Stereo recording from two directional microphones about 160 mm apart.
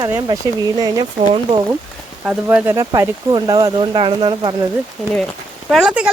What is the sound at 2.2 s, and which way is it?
Speech, 10° right (ahead or behind).